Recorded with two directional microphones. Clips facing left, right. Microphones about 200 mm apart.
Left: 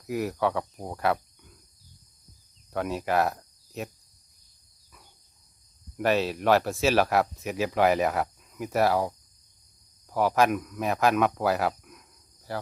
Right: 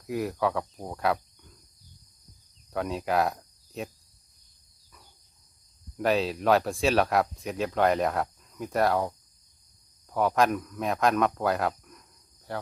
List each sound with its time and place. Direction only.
0.0 s speech: centre (ahead or behind)
2.7 s speech: centre (ahead or behind)
6.0 s speech: centre (ahead or behind)